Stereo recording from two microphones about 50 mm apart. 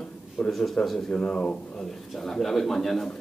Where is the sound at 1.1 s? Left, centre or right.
Left.